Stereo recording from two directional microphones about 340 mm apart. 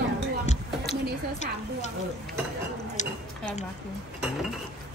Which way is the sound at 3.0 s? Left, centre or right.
Left.